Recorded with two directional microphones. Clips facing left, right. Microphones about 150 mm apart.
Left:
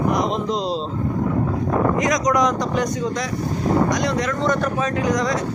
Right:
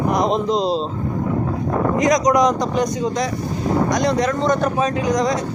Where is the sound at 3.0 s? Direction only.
25° right (ahead or behind).